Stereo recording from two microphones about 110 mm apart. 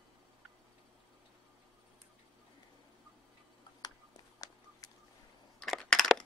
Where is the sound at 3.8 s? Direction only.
35° left (ahead or behind).